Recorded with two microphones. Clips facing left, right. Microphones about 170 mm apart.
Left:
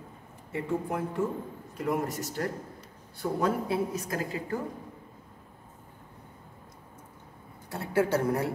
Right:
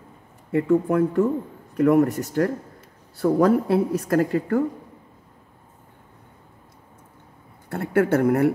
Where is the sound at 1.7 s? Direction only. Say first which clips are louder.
Right 13 dB; 65° right (ahead or behind).